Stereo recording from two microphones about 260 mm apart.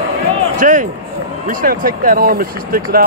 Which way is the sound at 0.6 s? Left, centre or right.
Right.